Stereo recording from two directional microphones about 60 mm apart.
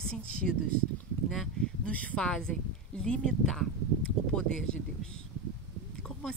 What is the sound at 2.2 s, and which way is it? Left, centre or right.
Speech, centre.